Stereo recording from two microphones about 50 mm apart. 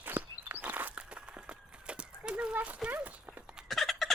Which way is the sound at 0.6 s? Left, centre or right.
Right.